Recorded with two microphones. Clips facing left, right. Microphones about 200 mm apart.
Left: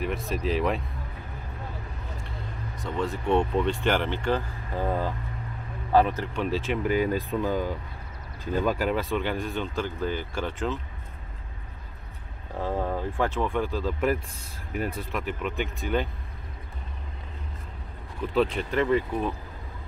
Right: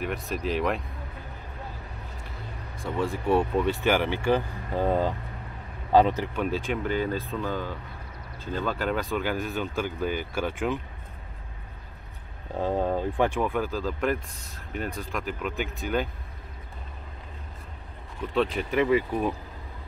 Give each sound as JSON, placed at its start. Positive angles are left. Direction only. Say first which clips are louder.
{"t": 0.0, "sound": "speech", "louder": "left 1 dB", "side_deg": 0}
{"t": 2.8, "sound": "a man's voice", "louder": "right 1 dB", "side_deg": -10}
{"t": 6.3, "sound": "speech", "louder": "left 1 dB", "side_deg": 0}
{"t": 12.5, "sound": "speech", "louder": "right 3 dB", "side_deg": -20}
{"t": 18.3, "sound": "speech", "louder": "left 1 dB", "side_deg": 0}